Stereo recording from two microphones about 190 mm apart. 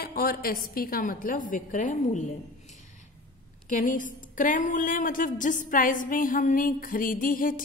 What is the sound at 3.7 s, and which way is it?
A woman's voice, 45° left (ahead or behind).